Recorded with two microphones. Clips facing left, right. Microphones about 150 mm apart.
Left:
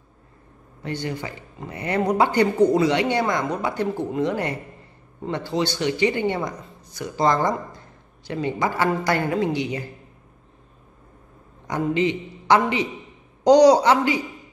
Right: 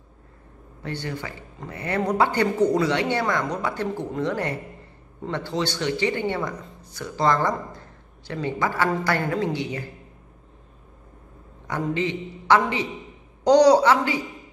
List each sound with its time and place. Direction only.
0.8 s speech: 15° left (ahead or behind)
11.6 s a woman's voice: 15° left (ahead or behind)